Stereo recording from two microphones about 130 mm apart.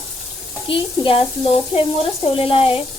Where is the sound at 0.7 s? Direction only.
45° left (ahead or behind).